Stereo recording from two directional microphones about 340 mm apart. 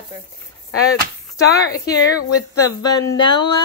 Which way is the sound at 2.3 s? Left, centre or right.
Left.